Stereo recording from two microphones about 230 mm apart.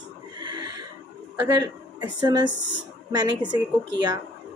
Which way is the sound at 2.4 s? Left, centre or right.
Left.